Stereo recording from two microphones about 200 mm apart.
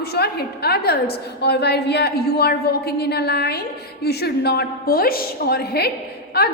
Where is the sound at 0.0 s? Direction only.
55° left (ahead or behind).